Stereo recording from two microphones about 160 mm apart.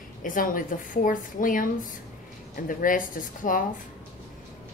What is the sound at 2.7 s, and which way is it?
Speech, 60° left (ahead or behind).